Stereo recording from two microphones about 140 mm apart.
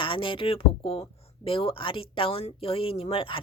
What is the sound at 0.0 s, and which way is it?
Speech, 35° left (ahead or behind).